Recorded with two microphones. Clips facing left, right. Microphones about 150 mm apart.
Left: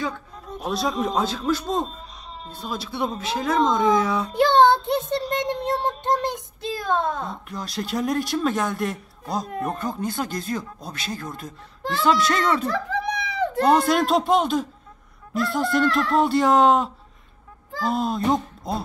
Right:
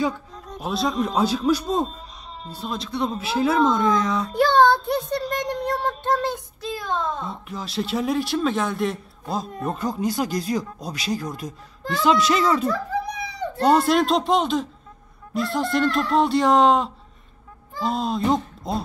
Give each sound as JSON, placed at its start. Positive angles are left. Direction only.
{"t": 0.5, "sound": "a man's voice", "side_deg": 0}
{"t": 3.2, "sound": "a man's voice", "side_deg": -5}
{"t": 4.3, "sound": "music", "side_deg": 20}
{"t": 6.0, "sound": "child singing", "side_deg": 20}
{"t": 6.8, "sound": "a child's voice", "side_deg": 55}
{"t": 7.4, "sound": "a man's voice", "side_deg": -5}
{"t": 12.7, "sound": "dog", "side_deg": 90}
{"t": 13.7, "sound": "a man's voice", "side_deg": 0}